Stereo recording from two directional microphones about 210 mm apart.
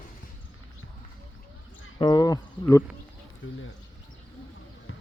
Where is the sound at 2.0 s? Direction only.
20° left (ahead or behind).